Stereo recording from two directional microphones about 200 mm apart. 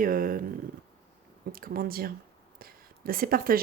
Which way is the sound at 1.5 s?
45° right (ahead or behind).